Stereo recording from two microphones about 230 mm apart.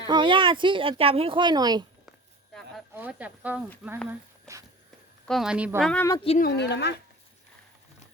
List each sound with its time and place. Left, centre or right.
0.1 s speech: right
2.5 s a sound: centre
2.9 s speech: centre
4.1 s walk: centre
5.3 s a woman's voice: centre
5.9 s speech: centre
6.1 s speech: left
6.4 s speech: left